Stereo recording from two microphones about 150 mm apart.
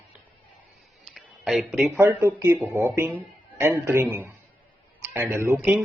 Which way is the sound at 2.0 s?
15° right (ahead or behind).